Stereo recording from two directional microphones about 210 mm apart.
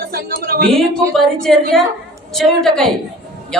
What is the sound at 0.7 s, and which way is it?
A woman's voice, centre (ahead or behind).